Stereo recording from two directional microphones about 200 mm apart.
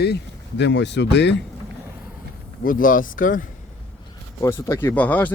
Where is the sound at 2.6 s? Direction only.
45° left (ahead or behind).